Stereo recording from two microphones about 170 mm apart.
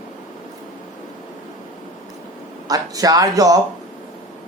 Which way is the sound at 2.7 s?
20° right (ahead or behind).